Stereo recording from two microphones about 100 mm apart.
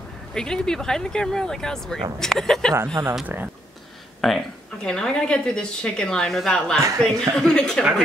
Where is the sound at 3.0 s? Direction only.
25° right (ahead or behind).